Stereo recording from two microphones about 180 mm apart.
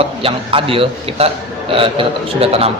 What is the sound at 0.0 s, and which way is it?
A man's voice, 30° right (ahead or behind).